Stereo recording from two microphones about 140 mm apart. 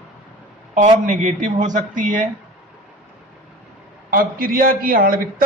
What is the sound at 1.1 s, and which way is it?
Speech, 60° right (ahead or behind).